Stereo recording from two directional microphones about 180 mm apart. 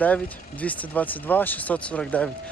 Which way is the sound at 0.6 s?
10° left (ahead or behind).